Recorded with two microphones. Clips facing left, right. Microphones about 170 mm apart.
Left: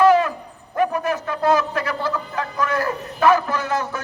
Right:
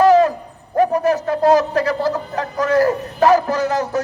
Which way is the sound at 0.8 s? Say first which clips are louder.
Right 5 dB; 35° right (ahead or behind).